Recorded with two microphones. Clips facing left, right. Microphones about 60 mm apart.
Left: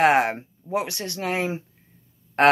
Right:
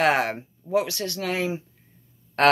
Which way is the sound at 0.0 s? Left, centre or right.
Left.